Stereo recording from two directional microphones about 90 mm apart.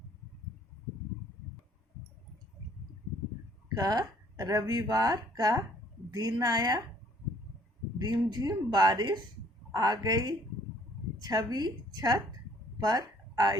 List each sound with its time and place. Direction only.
3.8 s speech: 45° right (ahead or behind)
7.9 s speech: 50° right (ahead or behind)
12.8 s a sound: 45° right (ahead or behind)